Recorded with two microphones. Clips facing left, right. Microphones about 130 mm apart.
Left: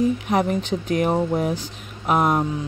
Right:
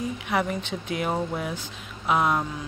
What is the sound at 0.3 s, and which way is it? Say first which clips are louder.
A woman's voice: left 6 dB; 40° left (ahead or behind).